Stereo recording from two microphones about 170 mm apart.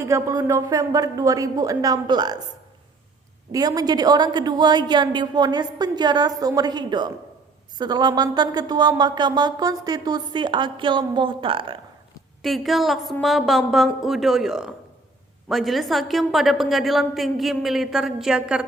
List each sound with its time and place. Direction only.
0.0 s speech: 15° right (ahead or behind)
3.5 s speech: 20° right (ahead or behind)
12.4 s a woman's voice: centre (ahead or behind)